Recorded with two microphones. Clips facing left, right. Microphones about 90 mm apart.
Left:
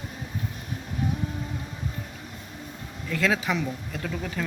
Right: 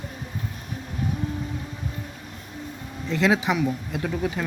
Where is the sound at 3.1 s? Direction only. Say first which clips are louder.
Right 4 dB; 20° right (ahead or behind).